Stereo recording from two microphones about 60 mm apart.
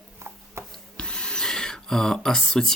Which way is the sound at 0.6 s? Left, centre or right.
Right.